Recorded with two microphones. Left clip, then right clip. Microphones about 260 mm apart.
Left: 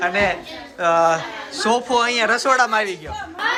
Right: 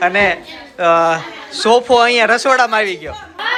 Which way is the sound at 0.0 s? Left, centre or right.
Centre.